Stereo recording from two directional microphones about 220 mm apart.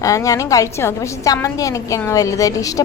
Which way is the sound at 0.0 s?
15° left (ahead or behind).